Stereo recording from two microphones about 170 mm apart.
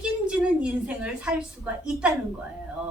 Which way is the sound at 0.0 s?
5° right (ahead or behind).